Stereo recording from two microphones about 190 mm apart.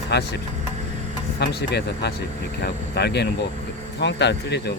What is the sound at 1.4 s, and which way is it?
Speech, 60° left (ahead or behind).